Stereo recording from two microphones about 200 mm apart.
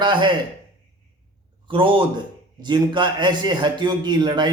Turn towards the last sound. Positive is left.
turn(degrees=-20)  # may be behind; listen again after turning